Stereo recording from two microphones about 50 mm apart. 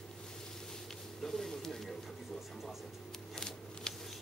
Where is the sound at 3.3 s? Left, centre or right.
Centre.